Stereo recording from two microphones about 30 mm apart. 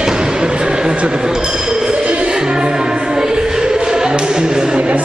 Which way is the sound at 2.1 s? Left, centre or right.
Right.